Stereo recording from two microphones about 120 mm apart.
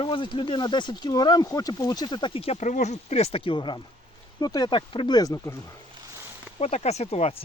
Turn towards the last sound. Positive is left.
turn(degrees=60)  # may be behind; listen again after turning